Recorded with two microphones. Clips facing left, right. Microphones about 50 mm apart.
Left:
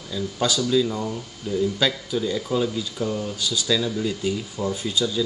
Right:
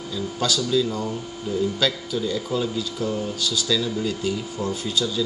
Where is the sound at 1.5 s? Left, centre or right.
Centre.